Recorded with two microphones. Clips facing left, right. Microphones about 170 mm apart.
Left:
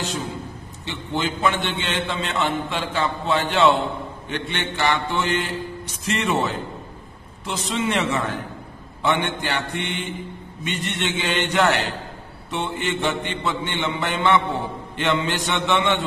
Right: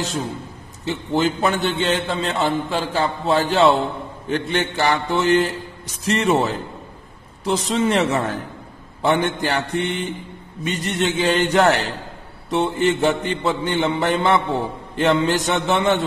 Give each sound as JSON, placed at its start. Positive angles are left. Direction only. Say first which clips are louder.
{"t": 0.8, "sound": "a man's voice", "louder": "right 6 dB", "side_deg": -40}